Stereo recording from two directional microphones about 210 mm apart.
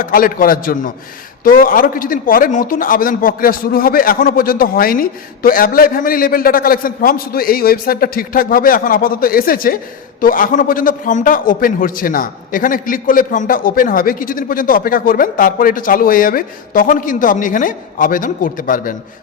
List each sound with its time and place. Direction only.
0.0 s a man's voice: 40° left (ahead or behind)